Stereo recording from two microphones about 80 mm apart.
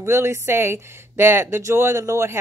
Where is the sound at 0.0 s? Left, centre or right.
Right.